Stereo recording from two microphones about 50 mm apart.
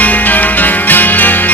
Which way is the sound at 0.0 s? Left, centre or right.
Left.